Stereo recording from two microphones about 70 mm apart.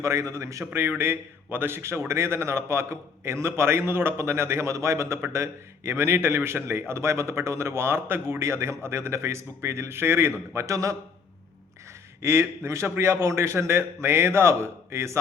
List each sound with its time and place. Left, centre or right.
0.0 s a man's voice: right
0.6 s a man's voice: right
12.2 s a man's voice: right